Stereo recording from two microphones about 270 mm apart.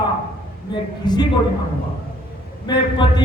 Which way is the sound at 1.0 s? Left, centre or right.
Centre.